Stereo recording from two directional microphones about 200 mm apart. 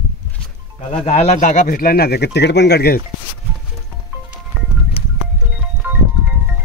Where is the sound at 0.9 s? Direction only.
30° left (ahead or behind); by 3.0 s 55° left (ahead or behind).